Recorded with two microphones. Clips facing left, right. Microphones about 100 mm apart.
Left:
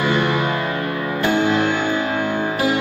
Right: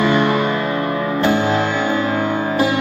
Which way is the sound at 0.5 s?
35° right (ahead or behind).